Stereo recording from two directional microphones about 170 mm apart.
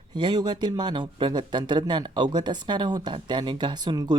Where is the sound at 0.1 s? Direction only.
25° right (ahead or behind).